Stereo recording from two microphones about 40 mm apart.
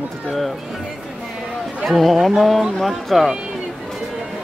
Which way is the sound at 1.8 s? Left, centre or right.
Centre.